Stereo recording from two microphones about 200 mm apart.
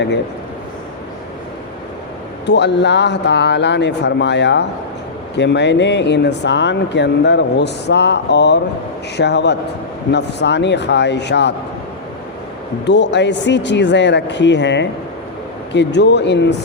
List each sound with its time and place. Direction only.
2.5 s speech: 60° left (ahead or behind)
12.8 s speech: 60° left (ahead or behind)